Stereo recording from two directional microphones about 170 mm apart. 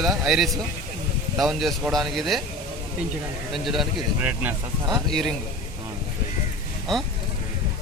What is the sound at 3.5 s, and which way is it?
Speech, centre (ahead or behind).